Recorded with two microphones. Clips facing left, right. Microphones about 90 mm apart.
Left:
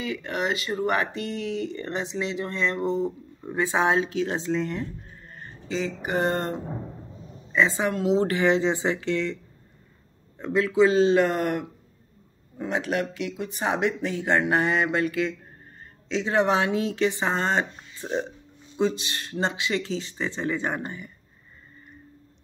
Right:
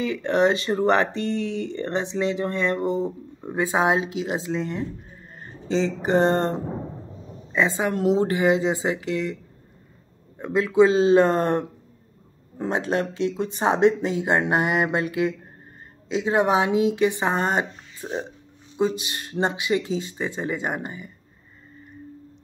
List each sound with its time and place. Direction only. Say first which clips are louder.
0.0 s speech: right 8 dB; 30° right (ahead or behind); by 4.8 s 5° right (ahead or behind)
5.7 s speech: right 6 dB; 30° right (ahead or behind); by 9.4 s 15° right (ahead or behind)
10.4 s speech: right 2 dB; 20° right (ahead or behind)